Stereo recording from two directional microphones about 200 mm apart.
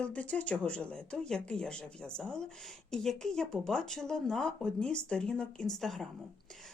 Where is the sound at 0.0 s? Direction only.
5° left (ahead or behind).